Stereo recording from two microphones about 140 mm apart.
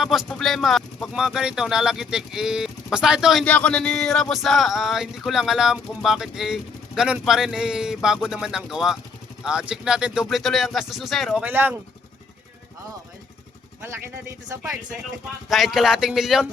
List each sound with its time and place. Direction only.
0.0 s speech: centre (ahead or behind)
3.4 s speech: 10° left (ahead or behind)
11.4 s speech: 15° right (ahead or behind)
14.5 s speech: 20° right (ahead or behind)
15.4 s speech: centre (ahead or behind)